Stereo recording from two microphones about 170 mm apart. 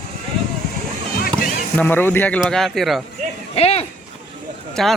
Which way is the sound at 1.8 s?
10° left (ahead or behind).